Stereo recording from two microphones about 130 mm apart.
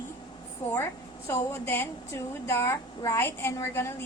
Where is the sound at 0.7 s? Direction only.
15° left (ahead or behind).